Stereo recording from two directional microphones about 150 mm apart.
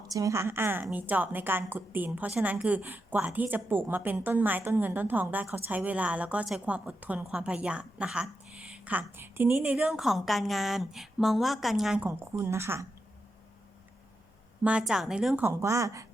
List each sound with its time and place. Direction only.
0.1 s a woman's voice: 20° right (ahead or behind); by 12.0 s 5° right (ahead or behind)
12.0 s a woman's voice: 15° right (ahead or behind)
14.6 s a woman's voice: 5° right (ahead or behind)
15.4 s speech: 20° right (ahead or behind)